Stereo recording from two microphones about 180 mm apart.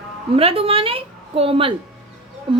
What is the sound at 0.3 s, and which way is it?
A woman's voice, 30° right (ahead or behind).